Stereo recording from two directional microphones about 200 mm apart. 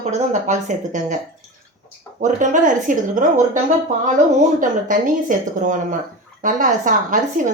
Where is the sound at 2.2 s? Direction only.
40° right (ahead or behind).